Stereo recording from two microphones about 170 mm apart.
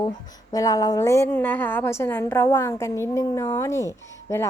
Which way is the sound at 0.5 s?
20° left (ahead or behind).